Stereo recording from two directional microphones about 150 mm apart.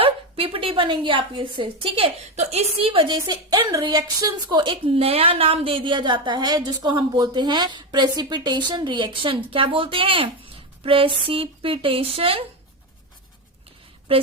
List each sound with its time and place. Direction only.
0.0 s a woman's voice: 35° right (ahead or behind)